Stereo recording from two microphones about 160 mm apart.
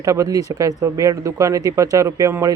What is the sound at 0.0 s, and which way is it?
Speech, 20° right (ahead or behind).